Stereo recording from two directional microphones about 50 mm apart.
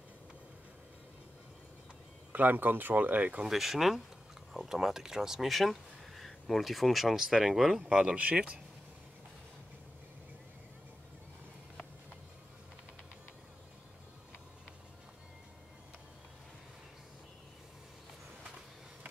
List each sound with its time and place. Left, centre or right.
2.3 s speech: right
3.4 s speech: centre
7.8 s speech: centre